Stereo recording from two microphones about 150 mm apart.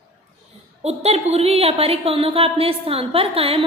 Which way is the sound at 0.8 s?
45° right (ahead or behind).